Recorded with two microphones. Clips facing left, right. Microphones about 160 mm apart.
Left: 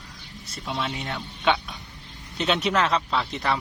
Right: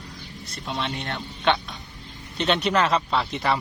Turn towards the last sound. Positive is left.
turn(degrees=0)  # may be behind; listen again after turning